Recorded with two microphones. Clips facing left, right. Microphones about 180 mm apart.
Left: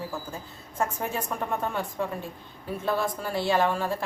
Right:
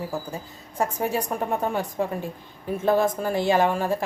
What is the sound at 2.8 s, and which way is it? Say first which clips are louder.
Speech: right 7 dB; 45° right (ahead or behind).